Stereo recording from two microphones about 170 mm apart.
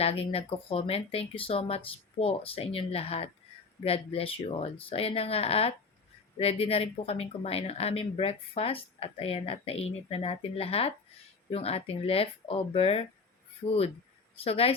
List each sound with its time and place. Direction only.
0.0 s speech: 35° left (ahead or behind)
14.4 s speech: 35° left (ahead or behind)